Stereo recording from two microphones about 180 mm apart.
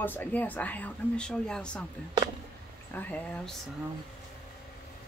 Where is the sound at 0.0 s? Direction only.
10° left (ahead or behind).